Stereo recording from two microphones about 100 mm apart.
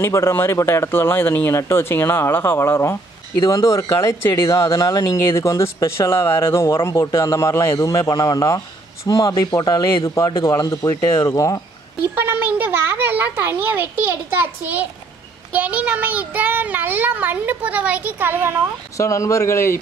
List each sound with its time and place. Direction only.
0.0 s a man's voice: 25° left (ahead or behind)
12.0 s a child's voice: 20° right (ahead or behind)
18.9 s a man's voice: 30° left (ahead or behind)